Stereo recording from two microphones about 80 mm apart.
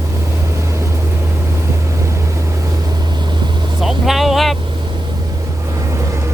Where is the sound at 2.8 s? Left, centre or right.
Right.